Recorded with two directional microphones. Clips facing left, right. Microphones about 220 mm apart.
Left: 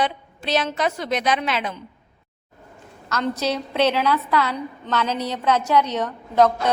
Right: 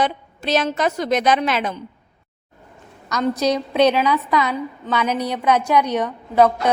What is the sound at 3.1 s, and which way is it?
A woman's voice, 15° right (ahead or behind).